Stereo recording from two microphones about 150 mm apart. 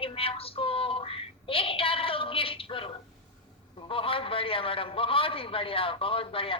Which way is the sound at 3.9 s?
35° left (ahead or behind).